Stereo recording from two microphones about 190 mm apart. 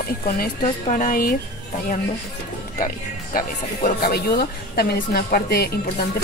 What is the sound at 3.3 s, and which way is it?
A woman's voice, 50° left (ahead or behind).